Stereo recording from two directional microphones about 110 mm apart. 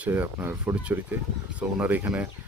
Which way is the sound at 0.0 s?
15° right (ahead or behind).